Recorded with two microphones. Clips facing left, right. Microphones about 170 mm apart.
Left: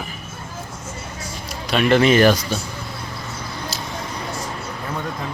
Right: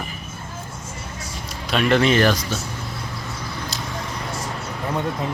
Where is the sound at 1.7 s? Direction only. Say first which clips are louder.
Left 2 dB; centre (ahead or behind).